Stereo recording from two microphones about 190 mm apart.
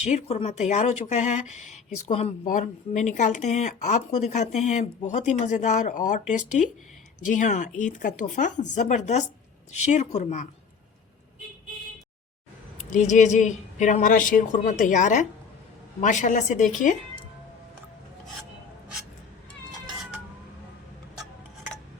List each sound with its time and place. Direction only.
0.0 s speech: 35° left (ahead or behind)
12.9 s speech: 40° left (ahead or behind)